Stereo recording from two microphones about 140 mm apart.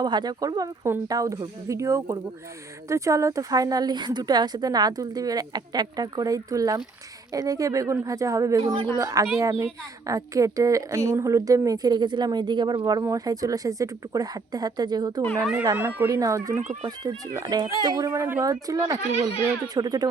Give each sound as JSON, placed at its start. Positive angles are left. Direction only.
{"t": 0.0, "sound": "speech", "side_deg": -30}
{"t": 15.7, "sound": "speech", "side_deg": -15}